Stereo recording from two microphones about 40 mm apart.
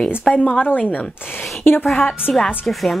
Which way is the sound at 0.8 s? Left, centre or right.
Left.